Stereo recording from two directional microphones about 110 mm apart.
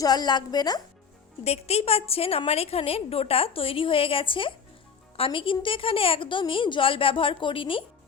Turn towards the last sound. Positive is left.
turn(degrees=55)  # may be behind; listen again after turning